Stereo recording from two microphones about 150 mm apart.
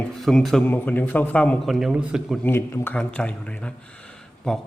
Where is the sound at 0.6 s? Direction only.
15° left (ahead or behind); by 2.4 s 5° right (ahead or behind).